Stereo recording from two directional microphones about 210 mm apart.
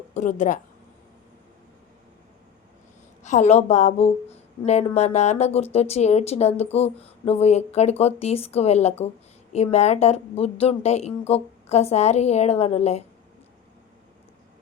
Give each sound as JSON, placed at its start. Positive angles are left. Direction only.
{"t": 0.1, "sound": "speech", "side_deg": 35}
{"t": 3.2, "sound": "a woman's voice", "side_deg": 35}